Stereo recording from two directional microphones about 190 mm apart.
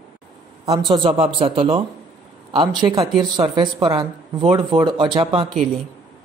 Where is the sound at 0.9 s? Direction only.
30° right (ahead or behind).